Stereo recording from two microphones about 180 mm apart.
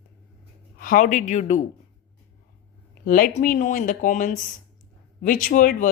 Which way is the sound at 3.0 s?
50° left (ahead or behind).